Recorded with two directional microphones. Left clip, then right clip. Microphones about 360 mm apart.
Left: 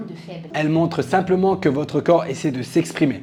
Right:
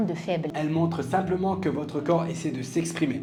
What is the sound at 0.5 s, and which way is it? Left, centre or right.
Speech, left.